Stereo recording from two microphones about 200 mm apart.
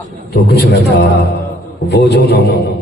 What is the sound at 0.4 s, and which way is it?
A man's voice, 55° left (ahead or behind).